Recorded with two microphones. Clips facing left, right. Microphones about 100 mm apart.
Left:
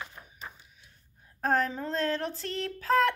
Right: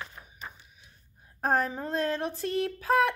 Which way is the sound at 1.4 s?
15° right (ahead or behind).